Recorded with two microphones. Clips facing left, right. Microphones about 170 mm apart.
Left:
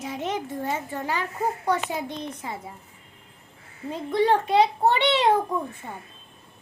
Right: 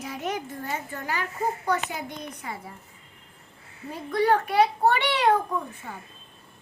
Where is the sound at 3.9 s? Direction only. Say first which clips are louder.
Left 1 dB; 25° left (ahead or behind).